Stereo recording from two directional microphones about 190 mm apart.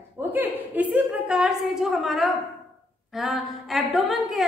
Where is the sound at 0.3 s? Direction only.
10° right (ahead or behind).